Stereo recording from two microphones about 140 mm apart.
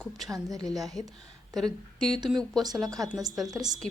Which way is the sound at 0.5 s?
25° right (ahead or behind).